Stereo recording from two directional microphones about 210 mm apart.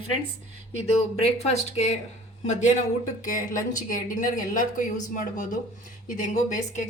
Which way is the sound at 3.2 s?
40° left (ahead or behind).